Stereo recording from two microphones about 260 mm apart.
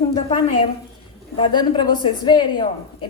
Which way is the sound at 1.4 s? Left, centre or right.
Centre.